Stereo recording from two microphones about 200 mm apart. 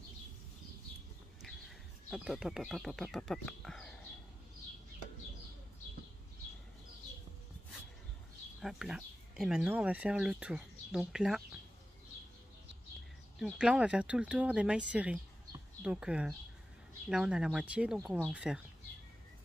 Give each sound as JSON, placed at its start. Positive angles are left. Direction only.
{"t": 2.0, "sound": "speech", "side_deg": 0}
{"t": 8.5, "sound": "speech", "side_deg": 0}
{"t": 13.4, "sound": "speech", "side_deg": -5}